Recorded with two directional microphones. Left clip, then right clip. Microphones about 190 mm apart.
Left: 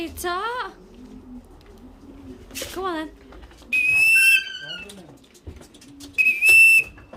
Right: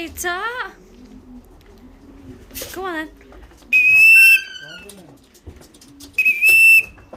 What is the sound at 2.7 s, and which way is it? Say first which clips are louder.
Speech: right 2 dB; 5° left (ahead or behind).